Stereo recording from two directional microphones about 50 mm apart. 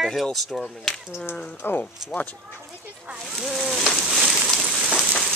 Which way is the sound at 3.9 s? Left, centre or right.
Centre.